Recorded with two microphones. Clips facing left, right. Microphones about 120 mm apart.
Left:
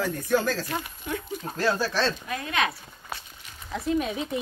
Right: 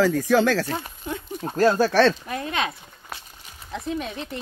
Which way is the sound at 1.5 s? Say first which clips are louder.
Right 8 dB; 45° right (ahead or behind).